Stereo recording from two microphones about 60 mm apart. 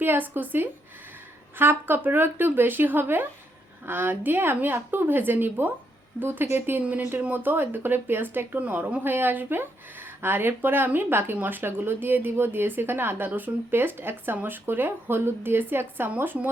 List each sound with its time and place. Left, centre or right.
0.0 s speech: right